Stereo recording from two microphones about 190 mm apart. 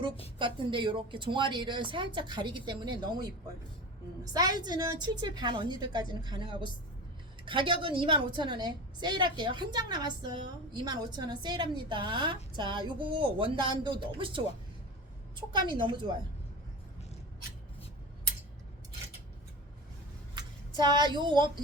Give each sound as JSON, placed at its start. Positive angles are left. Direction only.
{"t": 0.3, "sound": "a woman's voice", "side_deg": -25}
{"t": 20.3, "sound": "speech", "side_deg": -25}